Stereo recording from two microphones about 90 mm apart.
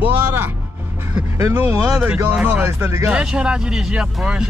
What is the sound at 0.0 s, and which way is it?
Music, 20° right (ahead or behind).